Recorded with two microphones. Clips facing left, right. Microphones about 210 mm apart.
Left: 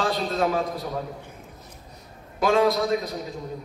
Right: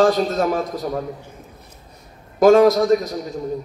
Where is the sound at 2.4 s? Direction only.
45° right (ahead or behind).